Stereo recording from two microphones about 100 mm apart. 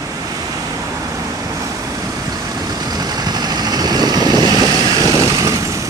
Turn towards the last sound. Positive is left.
turn(degrees=-35)  # may be behind; listen again after turning